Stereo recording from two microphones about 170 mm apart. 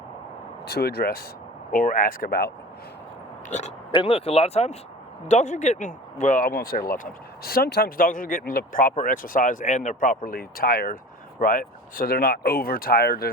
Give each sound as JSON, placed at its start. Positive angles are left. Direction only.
{"t": 0.7, "sound": "speech", "side_deg": 70}
{"t": 1.7, "sound": "speech", "side_deg": 55}
{"t": 3.5, "sound": "speech", "side_deg": 45}